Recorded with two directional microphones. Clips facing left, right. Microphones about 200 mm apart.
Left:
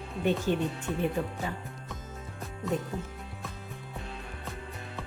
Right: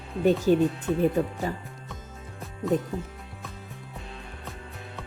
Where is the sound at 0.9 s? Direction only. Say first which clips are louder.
Right 6 dB; centre (ahead or behind).